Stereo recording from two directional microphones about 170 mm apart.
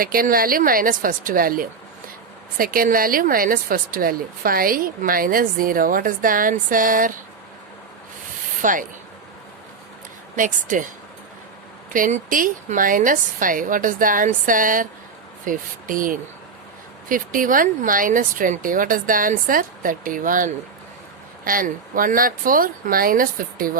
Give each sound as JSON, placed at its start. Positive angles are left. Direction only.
{"t": 0.0, "sound": "speech", "side_deg": -60}
{"t": 8.6, "sound": "speech", "side_deg": -50}
{"t": 10.3, "sound": "speech", "side_deg": -50}
{"t": 11.9, "sound": "speech", "side_deg": -50}